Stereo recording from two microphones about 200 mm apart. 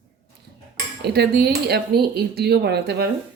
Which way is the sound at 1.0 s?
55° right (ahead or behind).